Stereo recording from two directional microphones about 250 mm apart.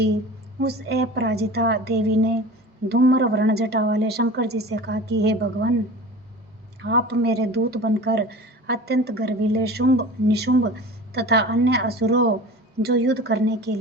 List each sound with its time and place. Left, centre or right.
0.6 s speech: right
6.8 s speech: right